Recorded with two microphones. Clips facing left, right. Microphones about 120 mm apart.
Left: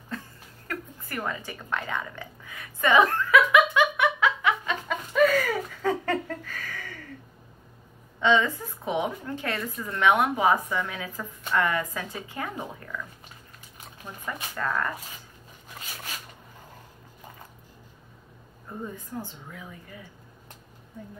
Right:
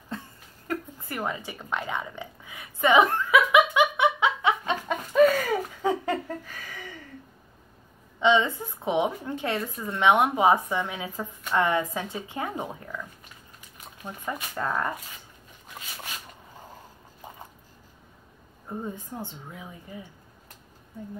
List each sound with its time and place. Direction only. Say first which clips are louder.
0.7 s a sound: right 4 dB; 20° right (ahead or behind)
8.2 s a woman's voice: right 1 dB; 20° right (ahead or behind)
14.0 s a woman's voice: right 2 dB; 25° right (ahead or behind)
18.7 s a woman's voice: right 2 dB; 25° right (ahead or behind)